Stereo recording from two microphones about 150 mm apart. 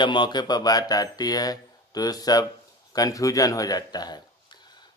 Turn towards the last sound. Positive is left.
turn(degrees=25)  # may be behind; listen again after turning